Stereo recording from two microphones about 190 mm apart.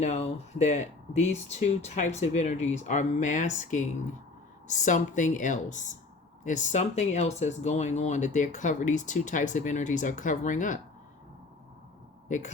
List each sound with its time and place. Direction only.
0.0 s speech: 35° left (ahead or behind)